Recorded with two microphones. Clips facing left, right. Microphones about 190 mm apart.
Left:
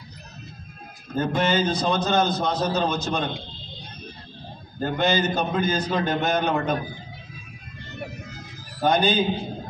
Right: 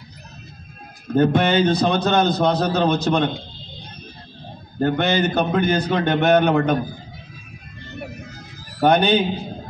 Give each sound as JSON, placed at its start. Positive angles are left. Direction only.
{"t": 1.1, "sound": "a man's voice", "side_deg": -65}
{"t": 4.8, "sound": "a man's voice", "side_deg": -60}
{"t": 8.8, "sound": "a man's voice", "side_deg": -65}